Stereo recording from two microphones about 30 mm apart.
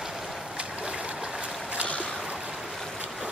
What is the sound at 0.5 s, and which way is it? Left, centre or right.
Boat, right.